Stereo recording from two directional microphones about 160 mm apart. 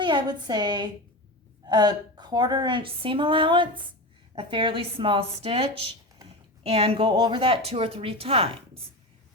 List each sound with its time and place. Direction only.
0.0 s a woman's voice: 30° right (ahead or behind)